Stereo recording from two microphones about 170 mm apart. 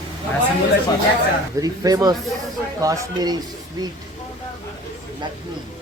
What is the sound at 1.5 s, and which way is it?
Speech, 20° right (ahead or behind).